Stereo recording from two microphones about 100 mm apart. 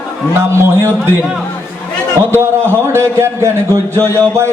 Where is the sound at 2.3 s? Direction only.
25° right (ahead or behind).